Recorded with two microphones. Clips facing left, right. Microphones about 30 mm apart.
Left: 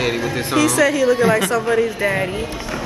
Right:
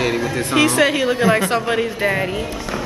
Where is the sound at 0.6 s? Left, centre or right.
Right.